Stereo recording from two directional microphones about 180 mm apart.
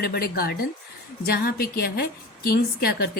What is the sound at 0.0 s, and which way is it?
Speech, 60° left (ahead or behind).